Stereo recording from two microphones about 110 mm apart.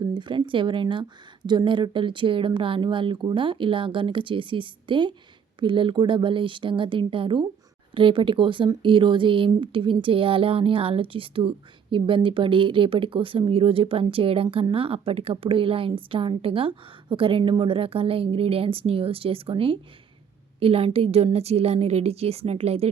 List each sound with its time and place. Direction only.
0.0 s a woman's voice: 45° right (ahead or behind); by 22.9 s 70° right (ahead or behind)